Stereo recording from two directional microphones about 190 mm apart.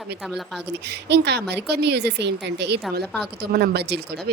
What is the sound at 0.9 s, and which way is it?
A woman's voice, 65° right (ahead or behind).